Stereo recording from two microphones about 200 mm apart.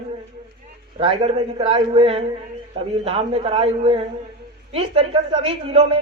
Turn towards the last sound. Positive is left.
turn(degrees=-25)  # may be behind; listen again after turning